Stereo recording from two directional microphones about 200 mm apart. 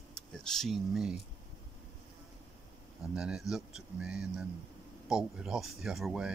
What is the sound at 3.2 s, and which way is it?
Speech, centre (ahead or behind).